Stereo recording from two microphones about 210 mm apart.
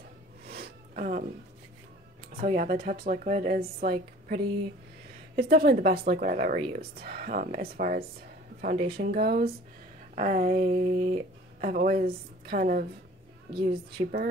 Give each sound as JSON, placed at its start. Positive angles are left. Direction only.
{"t": 0.5, "sound": "a sound", "side_deg": -45}
{"t": 2.3, "sound": "a woman's voice", "side_deg": -40}
{"t": 13.9, "sound": "a woman's voice", "side_deg": -45}